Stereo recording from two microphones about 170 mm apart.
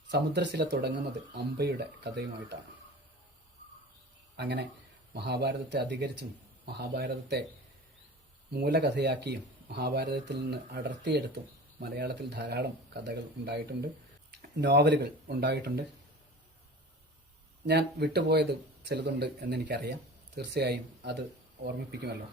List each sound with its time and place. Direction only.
0.1 s speech: 80° right
4.4 s speech: 90° right
5.1 s speech: 75° right (ahead or behind); by 6.2 s 90° right
6.7 s speech: 75° right (ahead or behind)
8.6 s speech: 80° right
11.8 s speech: 80° right
17.7 s speech: 75° right (ahead or behind)